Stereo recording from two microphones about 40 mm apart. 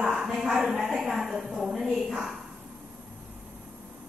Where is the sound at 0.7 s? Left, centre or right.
Centre.